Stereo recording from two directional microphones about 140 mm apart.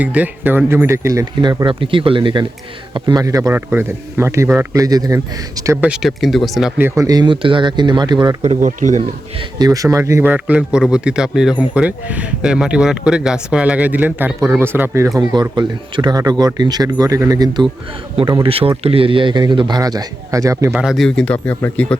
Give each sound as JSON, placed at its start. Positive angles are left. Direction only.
{"t": 0.0, "sound": "speech", "side_deg": -10}
{"t": 5.8, "sound": "speech", "side_deg": -5}
{"t": 6.7, "sound": "a man's voice", "side_deg": -20}
{"t": 8.4, "sound": "speech", "side_deg": -55}
{"t": 9.6, "sound": "speech", "side_deg": -25}
{"t": 15.2, "sound": "speech", "side_deg": -30}
{"t": 18.4, "sound": "a man's voice", "side_deg": -40}
{"t": 20.7, "sound": "speech", "side_deg": 0}